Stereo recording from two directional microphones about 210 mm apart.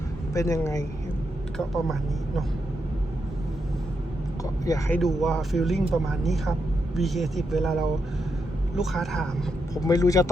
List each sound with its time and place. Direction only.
0.3 s speech: 15° left (ahead or behind)
1.5 s speech: centre (ahead or behind)
4.6 s speech: 15° left (ahead or behind)
4.9 s speech: centre (ahead or behind)
8.8 s speech: centre (ahead or behind)
9.8 s speech: 15° left (ahead or behind)